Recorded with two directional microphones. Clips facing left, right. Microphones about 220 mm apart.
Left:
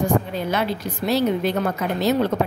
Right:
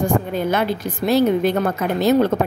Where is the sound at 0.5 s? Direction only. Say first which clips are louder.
Right 3 dB; 50° right (ahead or behind).